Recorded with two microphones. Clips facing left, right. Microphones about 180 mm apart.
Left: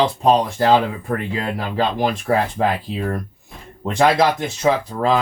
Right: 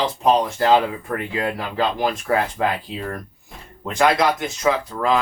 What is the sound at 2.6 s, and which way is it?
Speech, 35° left (ahead or behind).